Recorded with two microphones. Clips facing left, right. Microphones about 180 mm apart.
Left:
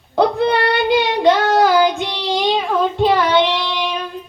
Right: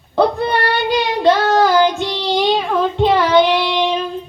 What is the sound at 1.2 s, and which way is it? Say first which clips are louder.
Child singing: right 1 dB; 10° left (ahead or behind).